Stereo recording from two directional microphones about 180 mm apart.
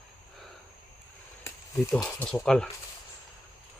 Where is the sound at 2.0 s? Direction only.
15° left (ahead or behind).